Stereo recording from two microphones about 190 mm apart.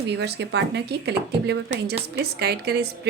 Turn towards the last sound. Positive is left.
turn(degrees=-55)  # may be behind; listen again after turning